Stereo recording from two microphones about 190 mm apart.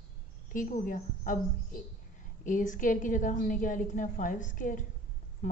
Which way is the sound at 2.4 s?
40° left (ahead or behind).